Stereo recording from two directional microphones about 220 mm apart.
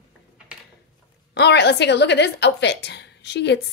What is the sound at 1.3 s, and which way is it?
A woman's voice, 50° left (ahead or behind).